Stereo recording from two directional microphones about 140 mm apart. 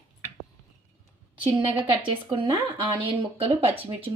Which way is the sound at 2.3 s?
35° right (ahead or behind).